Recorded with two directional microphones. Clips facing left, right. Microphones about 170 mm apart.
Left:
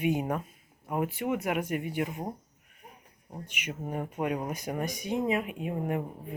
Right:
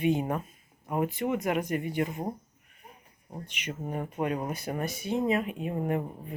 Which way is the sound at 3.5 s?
10° left (ahead or behind).